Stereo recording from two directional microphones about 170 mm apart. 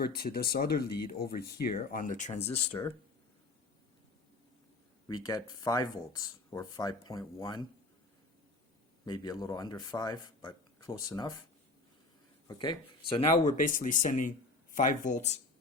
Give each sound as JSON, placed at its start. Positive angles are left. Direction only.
{"t": 0.0, "sound": "speech", "side_deg": 65}
{"t": 5.0, "sound": "speech", "side_deg": 20}
{"t": 9.0, "sound": "speech", "side_deg": 20}
{"t": 12.5, "sound": "speech", "side_deg": 30}